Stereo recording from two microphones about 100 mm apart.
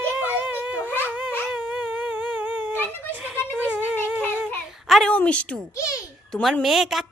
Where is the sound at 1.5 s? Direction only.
10° right (ahead or behind).